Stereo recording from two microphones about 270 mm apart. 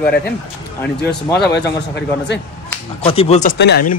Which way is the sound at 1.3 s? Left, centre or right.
Left.